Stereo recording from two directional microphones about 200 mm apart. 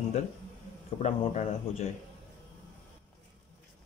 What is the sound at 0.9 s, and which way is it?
Speech, 35° left (ahead or behind).